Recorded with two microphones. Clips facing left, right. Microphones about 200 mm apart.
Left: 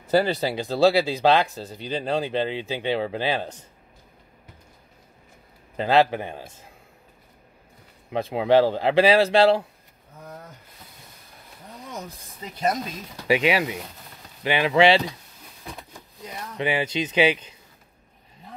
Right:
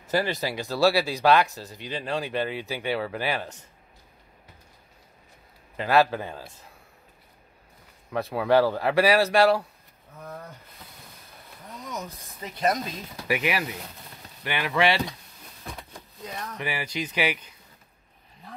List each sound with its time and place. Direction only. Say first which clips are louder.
0.1 s speech: left 5 dB; 30° left (ahead or behind)
5.8 s speech: left 2 dB; 25° left (ahead or behind)
8.1 s speech: left 3 dB; 20° left (ahead or behind)
13.3 s speech: left 6 dB; 25° left (ahead or behind)
16.5 s speech: left 8 dB; 20° left (ahead or behind)